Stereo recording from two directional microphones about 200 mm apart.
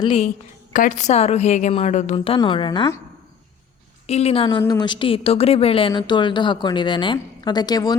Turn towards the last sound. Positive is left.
turn(degrees=20)  # may be behind; listen again after turning